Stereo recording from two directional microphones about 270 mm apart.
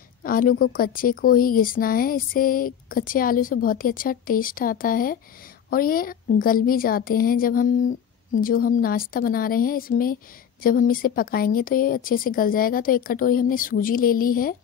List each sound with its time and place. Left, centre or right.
0.2 s a woman's voice: left